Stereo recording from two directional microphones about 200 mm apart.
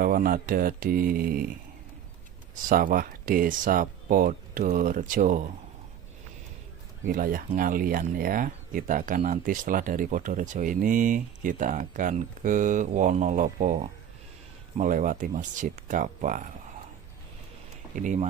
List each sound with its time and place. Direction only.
0.0 s speech: 45° right (ahead or behind)
2.7 s speech: 45° right (ahead or behind)
7.1 s speech: 45° right (ahead or behind)
17.9 s speech: 40° right (ahead or behind)